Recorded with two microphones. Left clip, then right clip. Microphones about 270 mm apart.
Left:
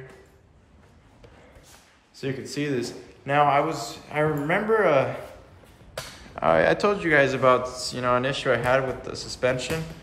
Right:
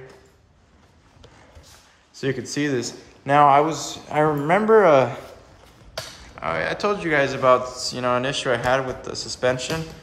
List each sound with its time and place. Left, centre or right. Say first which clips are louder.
2.1 s a man's voice: right 5 dB; right
6.3 s speech: left 5 dB; centre
6.9 s a man's voice: even; centre